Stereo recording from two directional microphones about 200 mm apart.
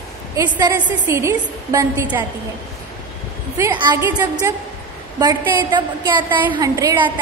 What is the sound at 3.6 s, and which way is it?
A woman's voice, 15° right (ahead or behind).